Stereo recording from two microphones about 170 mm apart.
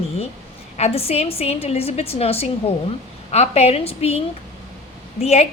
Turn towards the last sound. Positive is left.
turn(degrees=40)  # may be behind; listen again after turning